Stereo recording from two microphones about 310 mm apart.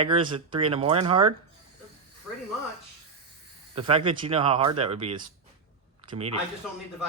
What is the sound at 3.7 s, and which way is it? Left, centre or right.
Speech, centre.